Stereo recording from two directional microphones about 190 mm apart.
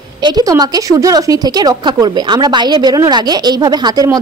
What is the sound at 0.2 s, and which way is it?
A woman's voice, 20° right (ahead or behind).